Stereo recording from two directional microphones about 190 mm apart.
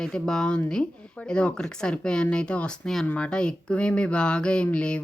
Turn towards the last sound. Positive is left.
turn(degrees=5)  # may be behind; listen again after turning